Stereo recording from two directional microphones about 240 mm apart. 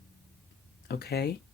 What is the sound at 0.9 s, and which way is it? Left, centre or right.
Speech, left.